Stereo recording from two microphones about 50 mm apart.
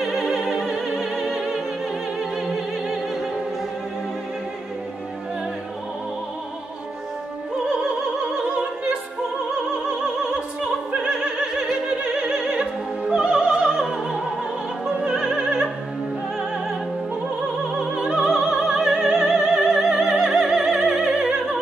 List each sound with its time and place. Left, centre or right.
0.0 s opera: centre
7.6 s opera: centre
9.8 s opera: centre
13.1 s music: centre
15.0 s opera: centre
17.9 s opera: centre